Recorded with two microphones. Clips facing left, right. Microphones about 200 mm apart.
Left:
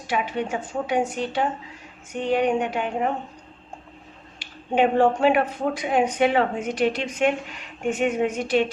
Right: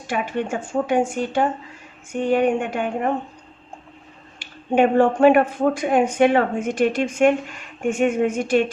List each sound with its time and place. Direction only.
0.1 s speech: 50° right (ahead or behind)
4.4 s speech: 50° right (ahead or behind)